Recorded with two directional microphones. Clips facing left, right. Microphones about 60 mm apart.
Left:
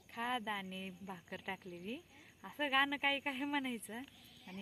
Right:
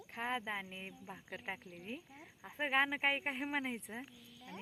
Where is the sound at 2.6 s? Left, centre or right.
Right.